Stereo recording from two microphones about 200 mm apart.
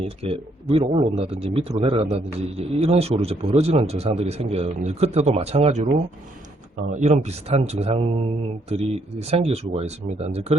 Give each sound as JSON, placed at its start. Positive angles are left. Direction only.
{"t": 0.0, "sound": "speech", "side_deg": -30}